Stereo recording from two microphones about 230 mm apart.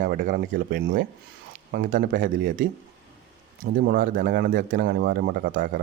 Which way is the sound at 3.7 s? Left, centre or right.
Right.